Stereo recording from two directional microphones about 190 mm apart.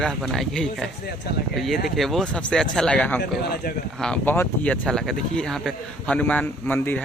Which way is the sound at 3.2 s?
55° left (ahead or behind).